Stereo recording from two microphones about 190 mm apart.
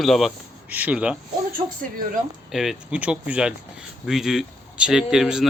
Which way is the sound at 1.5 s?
45° right (ahead or behind).